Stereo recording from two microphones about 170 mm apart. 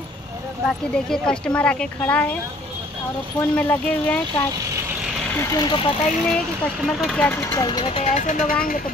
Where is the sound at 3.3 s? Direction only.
10° left (ahead or behind).